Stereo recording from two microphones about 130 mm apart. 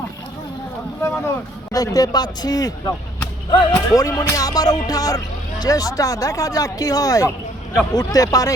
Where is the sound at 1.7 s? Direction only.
30° left (ahead or behind).